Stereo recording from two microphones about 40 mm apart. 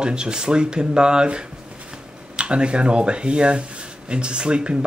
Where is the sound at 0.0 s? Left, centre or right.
Right.